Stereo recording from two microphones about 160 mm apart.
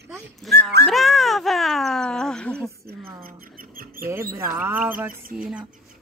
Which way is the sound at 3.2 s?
65° right (ahead or behind).